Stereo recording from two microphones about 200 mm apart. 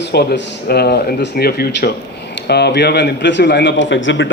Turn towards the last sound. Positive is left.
turn(degrees=70)  # may be behind; listen again after turning